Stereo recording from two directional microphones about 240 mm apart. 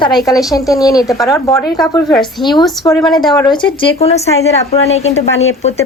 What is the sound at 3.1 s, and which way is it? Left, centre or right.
Speech, centre.